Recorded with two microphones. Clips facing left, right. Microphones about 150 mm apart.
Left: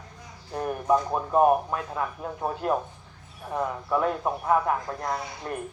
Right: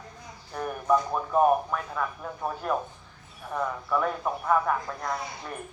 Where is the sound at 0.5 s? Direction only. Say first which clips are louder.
Left 1 dB; 25° left (ahead or behind).